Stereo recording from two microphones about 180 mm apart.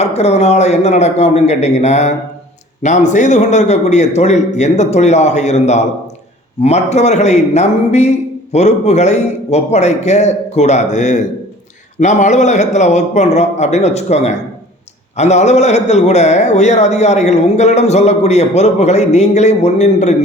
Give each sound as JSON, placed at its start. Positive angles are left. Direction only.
{"t": 0.0, "sound": "a man's voice", "side_deg": 35}